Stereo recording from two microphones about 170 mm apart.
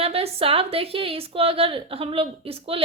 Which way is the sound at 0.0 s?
35° right (ahead or behind).